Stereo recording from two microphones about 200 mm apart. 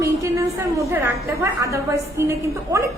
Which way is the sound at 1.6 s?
15° right (ahead or behind).